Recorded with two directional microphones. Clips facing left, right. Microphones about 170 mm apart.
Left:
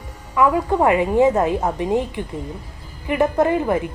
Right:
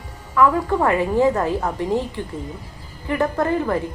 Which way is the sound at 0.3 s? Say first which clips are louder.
Left 1 dB; 15° left (ahead or behind).